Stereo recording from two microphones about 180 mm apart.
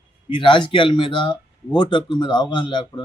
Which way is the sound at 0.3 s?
25° left (ahead or behind).